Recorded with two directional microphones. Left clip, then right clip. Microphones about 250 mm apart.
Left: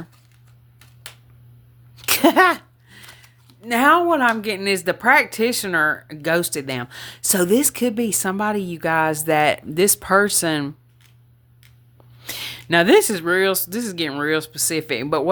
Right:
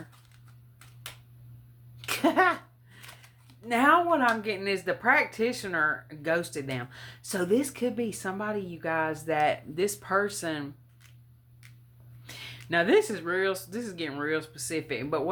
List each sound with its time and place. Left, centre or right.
2.0 s cough: left
3.7 s speech: left
12.2 s speech: left